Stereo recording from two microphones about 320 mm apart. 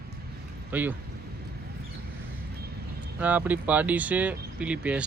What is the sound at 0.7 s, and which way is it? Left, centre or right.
Speech, centre.